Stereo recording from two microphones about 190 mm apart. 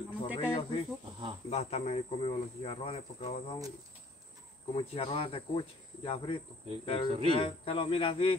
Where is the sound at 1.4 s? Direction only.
35° left (ahead or behind).